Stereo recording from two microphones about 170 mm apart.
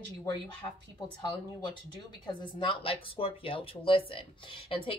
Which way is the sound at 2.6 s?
30° left (ahead or behind).